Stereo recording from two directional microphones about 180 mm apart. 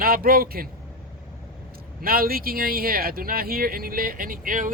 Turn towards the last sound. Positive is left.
turn(degrees=-50)  # may be behind; listen again after turning